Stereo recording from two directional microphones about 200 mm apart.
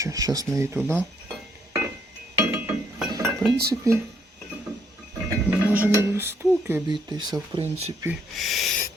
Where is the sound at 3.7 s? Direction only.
15° right (ahead or behind).